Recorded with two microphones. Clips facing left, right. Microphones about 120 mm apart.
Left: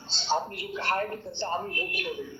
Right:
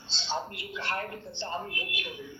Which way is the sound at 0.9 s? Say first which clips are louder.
Left 6 dB; 35° left (ahead or behind).